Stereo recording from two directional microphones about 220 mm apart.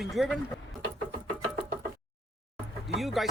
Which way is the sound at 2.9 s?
Centre (ahead or behind).